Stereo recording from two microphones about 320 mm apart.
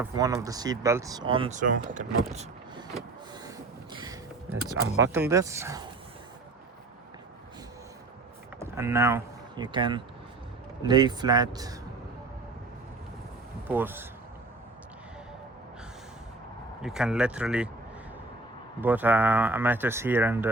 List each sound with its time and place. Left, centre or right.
0.0 s speech: centre
2.3 s vehicle: centre
3.9 s a sound: centre
4.8 s speech: right
5.3 s speech: centre
8.5 s speech: centre
13.7 s speech: centre
16.8 s speech: centre
18.8 s speech: centre